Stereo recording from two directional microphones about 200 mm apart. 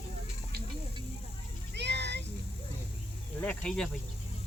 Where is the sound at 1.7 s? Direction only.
60° right (ahead or behind).